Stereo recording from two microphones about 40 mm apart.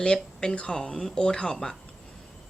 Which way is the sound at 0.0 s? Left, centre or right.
Centre.